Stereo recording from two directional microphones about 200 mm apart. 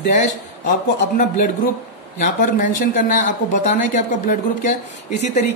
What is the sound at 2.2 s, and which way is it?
A woman's voice, 40° left (ahead or behind).